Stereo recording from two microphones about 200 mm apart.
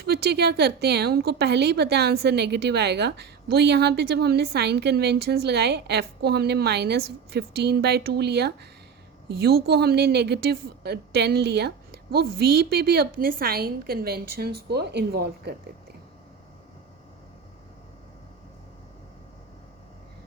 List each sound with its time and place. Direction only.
0.0 s a woman's voice: 50° right (ahead or behind)